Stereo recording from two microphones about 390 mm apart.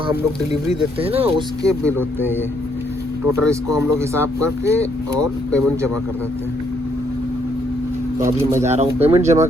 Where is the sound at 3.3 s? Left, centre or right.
Centre.